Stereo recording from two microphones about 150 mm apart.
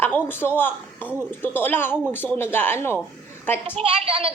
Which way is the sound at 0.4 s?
15° left (ahead or behind).